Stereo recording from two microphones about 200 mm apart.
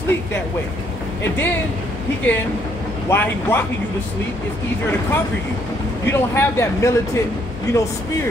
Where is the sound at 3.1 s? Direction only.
10° left (ahead or behind).